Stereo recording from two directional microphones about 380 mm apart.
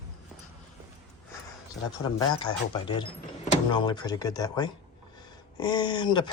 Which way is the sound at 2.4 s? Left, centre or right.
Centre.